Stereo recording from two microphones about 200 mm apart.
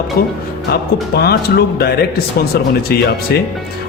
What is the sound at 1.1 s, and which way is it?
Speech, 50° left (ahead or behind).